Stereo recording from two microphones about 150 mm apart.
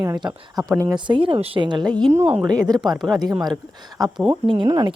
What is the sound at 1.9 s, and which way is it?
Speech, 5° left (ahead or behind).